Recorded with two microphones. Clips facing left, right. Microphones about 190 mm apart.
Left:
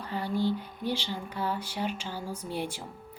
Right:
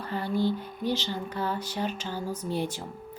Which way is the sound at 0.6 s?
10° left (ahead or behind).